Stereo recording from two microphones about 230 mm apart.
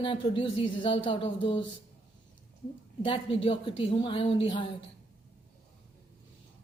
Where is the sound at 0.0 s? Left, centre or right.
Left.